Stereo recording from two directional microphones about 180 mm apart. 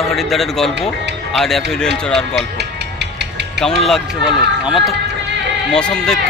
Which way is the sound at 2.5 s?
70° right (ahead or behind).